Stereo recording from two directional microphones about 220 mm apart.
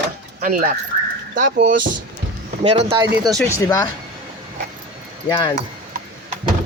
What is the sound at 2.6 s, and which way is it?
Speech, 25° right (ahead or behind).